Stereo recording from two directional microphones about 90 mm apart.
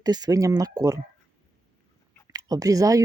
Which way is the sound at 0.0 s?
45° right (ahead or behind).